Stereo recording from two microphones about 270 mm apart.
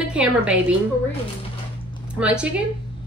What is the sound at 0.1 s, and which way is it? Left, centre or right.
Speech, centre.